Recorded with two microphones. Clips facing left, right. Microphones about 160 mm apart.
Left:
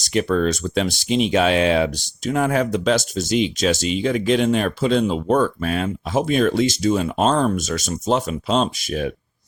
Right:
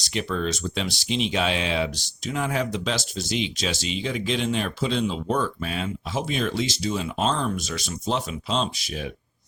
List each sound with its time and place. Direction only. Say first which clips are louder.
0.0 s speech: left 8 dB; 50° left (ahead or behind)